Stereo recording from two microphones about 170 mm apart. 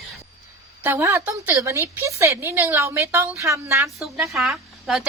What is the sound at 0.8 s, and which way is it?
A woman's voice, 15° right (ahead or behind).